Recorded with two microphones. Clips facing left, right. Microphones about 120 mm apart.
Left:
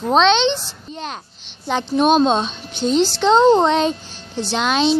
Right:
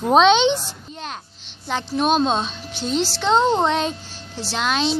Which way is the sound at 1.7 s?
5° left (ahead or behind).